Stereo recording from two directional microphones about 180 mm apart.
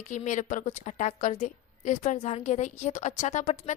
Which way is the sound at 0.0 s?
40° left (ahead or behind).